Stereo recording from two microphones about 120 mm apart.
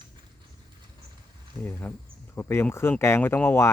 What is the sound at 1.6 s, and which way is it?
Speech, 15° left (ahead or behind).